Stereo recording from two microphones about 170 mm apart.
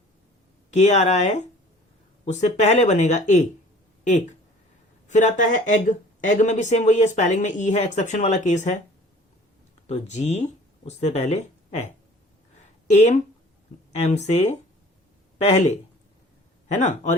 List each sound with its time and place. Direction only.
0.7 s speech: 45° left (ahead or behind)
9.8 s speech: 40° left (ahead or behind)
12.9 s speech: 45° left (ahead or behind)
14.3 s speech: 40° left (ahead or behind)
16.8 s speech: 45° left (ahead or behind)